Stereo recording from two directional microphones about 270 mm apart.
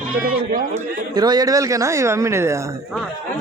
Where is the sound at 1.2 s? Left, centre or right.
Centre.